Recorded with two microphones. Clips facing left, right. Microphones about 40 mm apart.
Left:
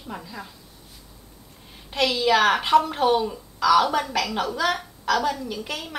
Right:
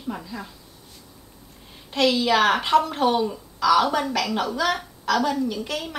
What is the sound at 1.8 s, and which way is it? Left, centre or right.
A woman's voice, centre.